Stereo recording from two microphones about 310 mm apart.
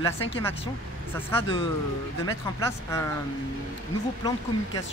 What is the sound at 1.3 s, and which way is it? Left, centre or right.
Speech, centre.